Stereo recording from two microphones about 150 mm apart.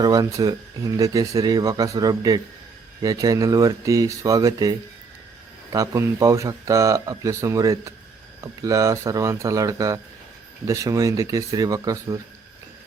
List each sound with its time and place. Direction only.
0.0 s speech: 25° right (ahead or behind)